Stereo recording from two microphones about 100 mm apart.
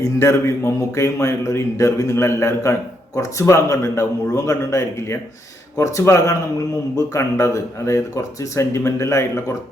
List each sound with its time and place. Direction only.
0.0 s a man's voice: 30° left (ahead or behind)